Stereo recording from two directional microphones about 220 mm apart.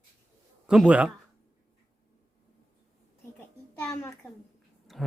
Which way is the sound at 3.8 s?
15° left (ahead or behind).